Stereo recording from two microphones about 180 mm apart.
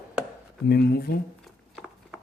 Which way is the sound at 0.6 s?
60° left (ahead or behind).